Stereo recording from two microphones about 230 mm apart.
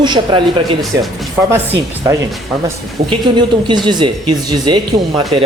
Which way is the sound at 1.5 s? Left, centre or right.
Centre.